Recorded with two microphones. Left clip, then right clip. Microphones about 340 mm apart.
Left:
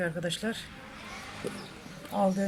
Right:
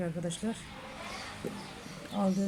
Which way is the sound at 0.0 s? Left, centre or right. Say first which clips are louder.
Left 5 dB; left.